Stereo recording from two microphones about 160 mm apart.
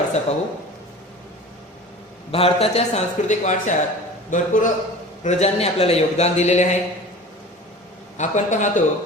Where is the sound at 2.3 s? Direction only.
40° left (ahead or behind); by 4.5 s 55° left (ahead or behind).